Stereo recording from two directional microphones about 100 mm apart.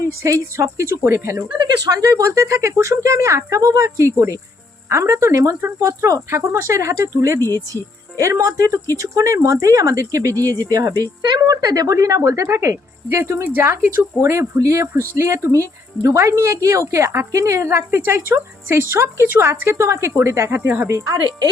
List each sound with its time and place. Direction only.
0.0 s speech: 30° right (ahead or behind)
1.5 s speech: 40° right (ahead or behind)